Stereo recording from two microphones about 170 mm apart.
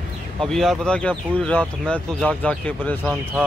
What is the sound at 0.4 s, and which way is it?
Speech, centre (ahead or behind).